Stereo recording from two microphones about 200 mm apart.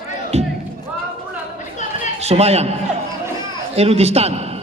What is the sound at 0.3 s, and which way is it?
Speech, 35° right (ahead or behind).